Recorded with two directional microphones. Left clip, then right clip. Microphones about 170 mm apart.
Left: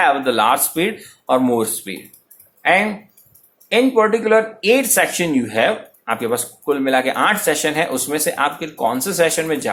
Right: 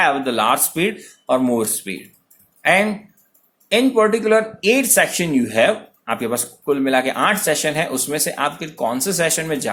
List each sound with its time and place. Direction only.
0.0 s speech: 25° right (ahead or behind)